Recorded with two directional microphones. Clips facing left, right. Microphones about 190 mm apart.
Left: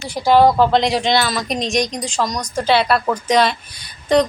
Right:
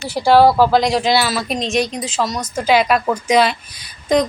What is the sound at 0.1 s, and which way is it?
Speech, 10° right (ahead or behind).